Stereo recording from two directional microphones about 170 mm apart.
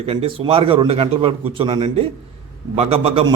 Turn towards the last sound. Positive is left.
turn(degrees=-35)  # may be behind; listen again after turning